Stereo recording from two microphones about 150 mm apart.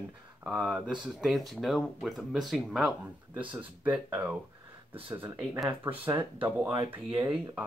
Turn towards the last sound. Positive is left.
turn(degrees=-35)  # may be behind; listen again after turning